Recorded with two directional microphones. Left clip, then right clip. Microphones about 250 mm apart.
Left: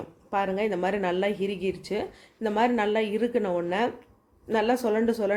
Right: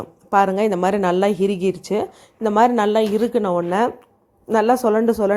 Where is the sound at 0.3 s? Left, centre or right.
Right.